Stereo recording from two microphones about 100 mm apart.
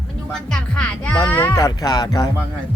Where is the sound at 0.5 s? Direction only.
10° left (ahead or behind).